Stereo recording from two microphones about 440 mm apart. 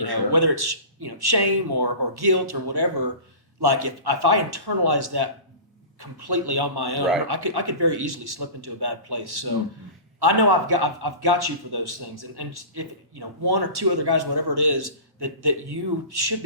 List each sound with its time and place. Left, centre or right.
0.0 s a man's voice: right